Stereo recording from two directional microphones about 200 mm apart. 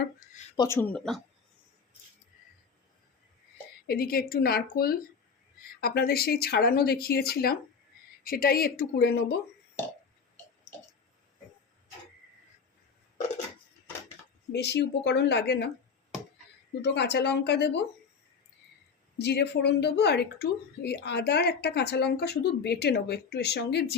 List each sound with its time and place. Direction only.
0.5 s speech: 15° left (ahead or behind)
3.8 s speech: 50° left (ahead or behind)
14.5 s speech: 60° left (ahead or behind)
16.8 s speech: 60° left (ahead or behind)
19.2 s speech: 55° left (ahead or behind)